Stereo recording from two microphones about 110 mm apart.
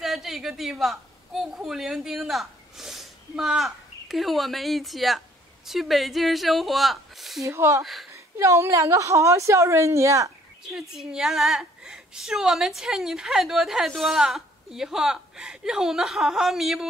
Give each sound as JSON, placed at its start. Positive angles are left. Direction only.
{"t": 0.0, "sound": "a woman's voice", "side_deg": 0}
{"t": 7.4, "sound": "a woman's voice", "side_deg": -25}
{"t": 7.8, "sound": "a woman's voice", "side_deg": 0}
{"t": 8.1, "sound": "a woman's voice", "side_deg": -25}
{"t": 10.6, "sound": "a woman's voice", "side_deg": -5}